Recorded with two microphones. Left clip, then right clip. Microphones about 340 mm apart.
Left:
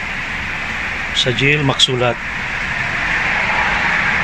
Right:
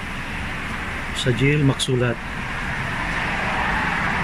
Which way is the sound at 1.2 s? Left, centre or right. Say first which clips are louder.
Left 6 dB; centre.